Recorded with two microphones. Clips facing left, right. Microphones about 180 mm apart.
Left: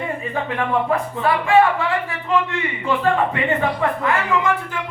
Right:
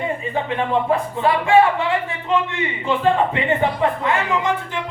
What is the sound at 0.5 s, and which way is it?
Speech, 25° right (ahead or behind).